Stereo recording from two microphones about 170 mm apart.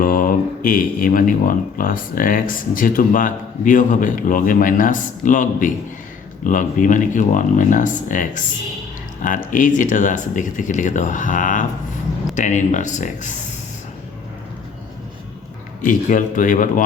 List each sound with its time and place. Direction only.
0.0 s speech: 55° left (ahead or behind)
15.8 s speech: 50° left (ahead or behind)